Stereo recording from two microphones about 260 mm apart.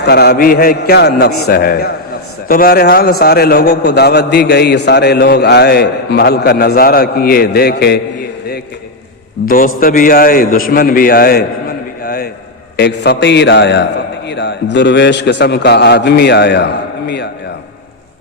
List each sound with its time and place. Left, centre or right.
0.0 s a man's voice: left
9.5 s a man's voice: left
12.0 s a sound: left
12.7 s a man's voice: left